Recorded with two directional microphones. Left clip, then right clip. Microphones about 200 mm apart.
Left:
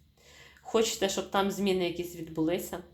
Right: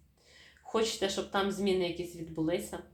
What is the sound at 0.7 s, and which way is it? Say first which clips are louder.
Speech: left 3 dB; 35° left (ahead or behind).